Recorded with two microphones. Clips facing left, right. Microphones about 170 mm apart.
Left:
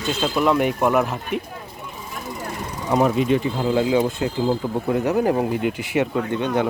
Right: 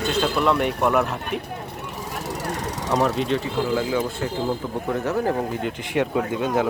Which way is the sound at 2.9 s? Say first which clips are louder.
Left 4 dB; 5° left (ahead or behind).